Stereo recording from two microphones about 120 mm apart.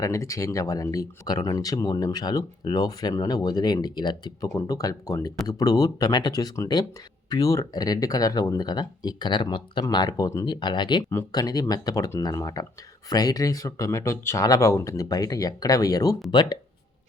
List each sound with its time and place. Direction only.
0.0 s speech: 25° left (ahead or behind)
11.1 s speech: 25° left (ahead or behind)